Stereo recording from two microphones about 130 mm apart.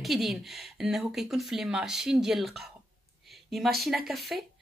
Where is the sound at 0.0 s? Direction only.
Centre (ahead or behind).